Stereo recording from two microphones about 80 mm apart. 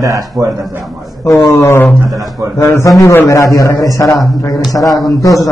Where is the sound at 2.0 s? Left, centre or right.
Right.